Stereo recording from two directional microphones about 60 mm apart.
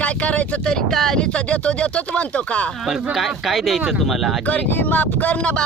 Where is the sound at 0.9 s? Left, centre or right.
Centre.